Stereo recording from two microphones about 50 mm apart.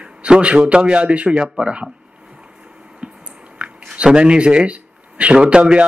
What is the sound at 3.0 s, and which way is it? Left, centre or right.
Chewing, right.